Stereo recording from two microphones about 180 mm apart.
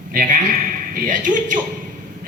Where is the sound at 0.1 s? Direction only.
50° right (ahead or behind).